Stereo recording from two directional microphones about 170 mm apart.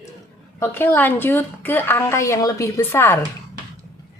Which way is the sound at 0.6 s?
15° left (ahead or behind).